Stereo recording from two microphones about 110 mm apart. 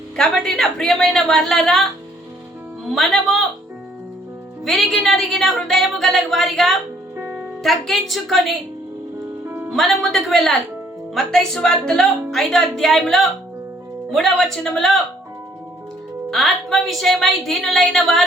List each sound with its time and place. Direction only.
0.2 s a woman's voice: 5° left (ahead or behind)
2.8 s a woman's voice: centre (ahead or behind)
4.6 s a woman's voice: centre (ahead or behind)
7.2 s music: 20° right (ahead or behind)
7.6 s a woman's voice: centre (ahead or behind)
9.5 s music: 20° right (ahead or behind)
9.7 s a woman's voice: centre (ahead or behind)
16.3 s a woman's voice: 5° left (ahead or behind)